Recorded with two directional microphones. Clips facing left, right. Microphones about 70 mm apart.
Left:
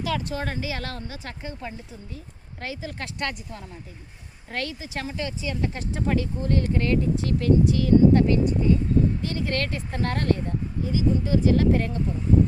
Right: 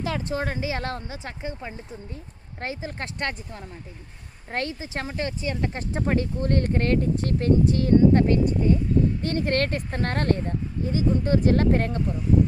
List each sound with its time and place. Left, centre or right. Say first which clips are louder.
0.0 s speech: right 1 dB; right
2.6 s speech: right 2 dB; right
6.4 s speech: right 1 dB; right